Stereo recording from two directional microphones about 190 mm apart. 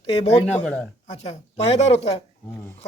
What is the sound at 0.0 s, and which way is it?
Speech, 30° left (ahead or behind).